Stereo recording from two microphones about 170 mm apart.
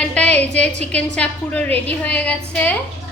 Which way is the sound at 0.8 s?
5° left (ahead or behind).